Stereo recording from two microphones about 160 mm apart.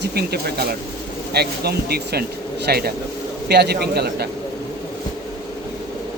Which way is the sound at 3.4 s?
90° right.